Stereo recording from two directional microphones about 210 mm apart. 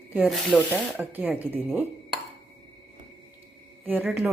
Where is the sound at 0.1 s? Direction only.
5° right (ahead or behind).